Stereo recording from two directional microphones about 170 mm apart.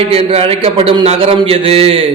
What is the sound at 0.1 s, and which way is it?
A man's voice, 35° right (ahead or behind).